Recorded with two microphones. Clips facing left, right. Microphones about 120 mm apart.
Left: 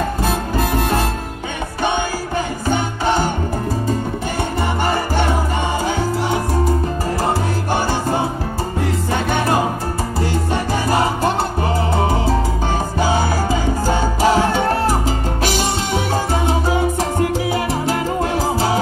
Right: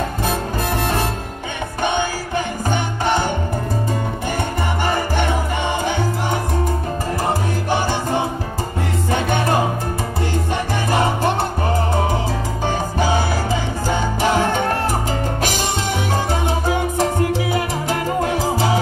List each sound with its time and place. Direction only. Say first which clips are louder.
0.6 s music: left 4 dB; 45° left (ahead or behind)
5.9 s music: left 2 dB; 40° left (ahead or behind)
7.7 s music: left 1 dB; 45° left (ahead or behind)
10.5 s music: left 2 dB; 40° left (ahead or behind)
13.0 s music: left 2 dB; 45° left (ahead or behind)
17.0 s salsa music: even; 45° left (ahead or behind)